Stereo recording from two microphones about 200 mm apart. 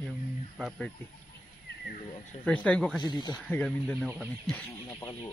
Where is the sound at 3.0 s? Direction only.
20° left (ahead or behind).